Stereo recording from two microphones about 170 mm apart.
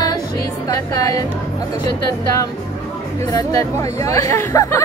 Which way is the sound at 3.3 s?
20° left (ahead or behind).